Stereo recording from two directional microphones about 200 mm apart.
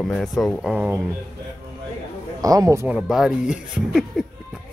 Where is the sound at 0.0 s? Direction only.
Centre (ahead or behind).